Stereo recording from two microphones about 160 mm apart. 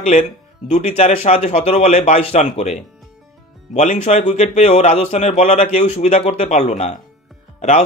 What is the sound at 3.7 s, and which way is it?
Speech, 50° left (ahead or behind).